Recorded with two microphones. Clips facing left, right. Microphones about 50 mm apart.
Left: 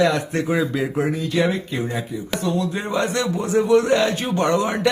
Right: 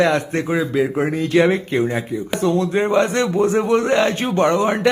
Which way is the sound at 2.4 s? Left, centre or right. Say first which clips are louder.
Right 7 dB; right.